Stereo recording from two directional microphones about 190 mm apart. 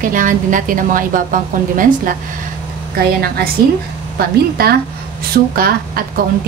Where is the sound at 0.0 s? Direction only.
45° right (ahead or behind).